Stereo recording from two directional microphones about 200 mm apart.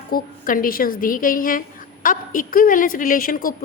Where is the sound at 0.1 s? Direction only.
45° left (ahead or behind).